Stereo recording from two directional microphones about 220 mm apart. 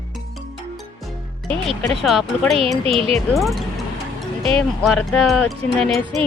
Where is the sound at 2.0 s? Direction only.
Centre (ahead or behind).